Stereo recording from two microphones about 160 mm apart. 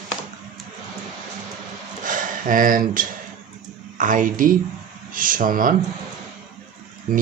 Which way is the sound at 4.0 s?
55° right (ahead or behind).